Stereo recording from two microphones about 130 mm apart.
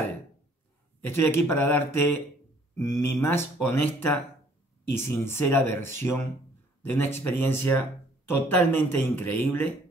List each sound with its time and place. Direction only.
1.0 s speech: 15° left (ahead or behind)